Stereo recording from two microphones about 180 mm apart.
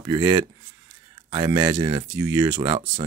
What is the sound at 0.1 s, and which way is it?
Speech, 20° right (ahead or behind).